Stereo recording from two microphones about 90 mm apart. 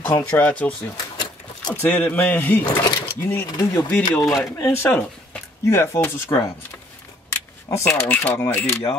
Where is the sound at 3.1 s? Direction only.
25° left (ahead or behind).